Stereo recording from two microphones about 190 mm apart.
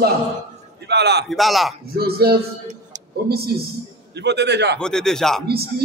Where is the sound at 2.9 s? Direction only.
40° right (ahead or behind).